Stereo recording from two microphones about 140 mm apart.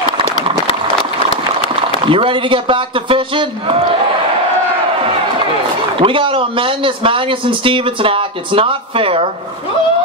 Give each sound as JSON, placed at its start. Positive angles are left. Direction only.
{"t": 2.0, "sound": "a man's voice", "side_deg": -40}
{"t": 5.9, "sound": "a man's voice", "side_deg": -40}